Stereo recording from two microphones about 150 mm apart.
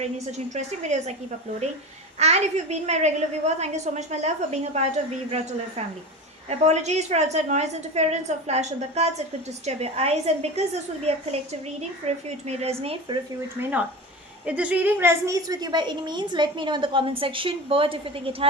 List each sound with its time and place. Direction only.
0.0 s a woman's voice: 50° right (ahead or behind)
2.1 s a woman's voice: 45° right (ahead or behind)
6.5 s a woman's voice: 50° right (ahead or behind)
13.6 s a woman's voice: 10° right (ahead or behind); by 18.4 s 40° right (ahead or behind)